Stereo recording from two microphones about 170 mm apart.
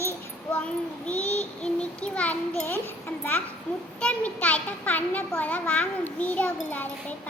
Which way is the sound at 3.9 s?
5° left (ahead or behind).